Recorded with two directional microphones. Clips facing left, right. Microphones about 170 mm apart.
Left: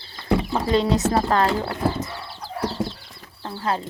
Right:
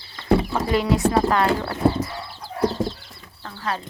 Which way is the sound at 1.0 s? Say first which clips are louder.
Right 1 dB; 35° left (ahead or behind).